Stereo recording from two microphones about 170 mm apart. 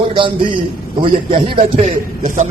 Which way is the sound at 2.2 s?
45° right (ahead or behind).